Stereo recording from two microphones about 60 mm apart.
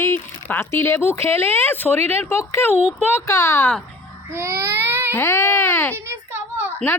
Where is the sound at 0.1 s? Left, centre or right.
Left.